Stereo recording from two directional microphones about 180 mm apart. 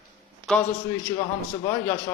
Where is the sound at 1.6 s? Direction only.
20° left (ahead or behind).